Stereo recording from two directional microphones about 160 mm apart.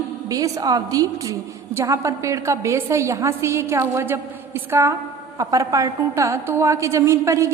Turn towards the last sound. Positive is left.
turn(degrees=-20)  # may be behind; listen again after turning